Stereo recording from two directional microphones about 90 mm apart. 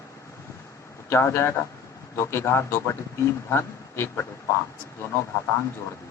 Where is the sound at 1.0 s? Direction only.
30° left (ahead or behind).